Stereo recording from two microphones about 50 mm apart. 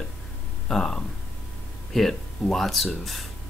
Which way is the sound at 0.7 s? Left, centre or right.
Centre.